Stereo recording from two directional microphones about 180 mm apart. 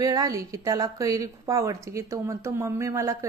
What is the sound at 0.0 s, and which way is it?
A woman's voice, 20° right (ahead or behind).